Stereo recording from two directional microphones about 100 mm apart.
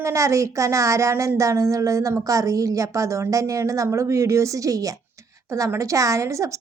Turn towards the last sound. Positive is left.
turn(degrees=-30)  # may be behind; listen again after turning